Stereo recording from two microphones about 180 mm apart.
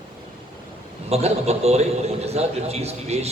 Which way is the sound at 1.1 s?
35° right (ahead or behind).